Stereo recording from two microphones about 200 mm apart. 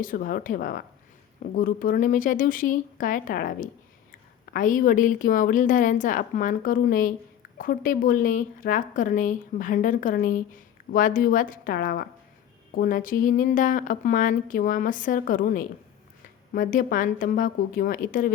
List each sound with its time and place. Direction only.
0.0 s a woman's voice: 45° left (ahead or behind)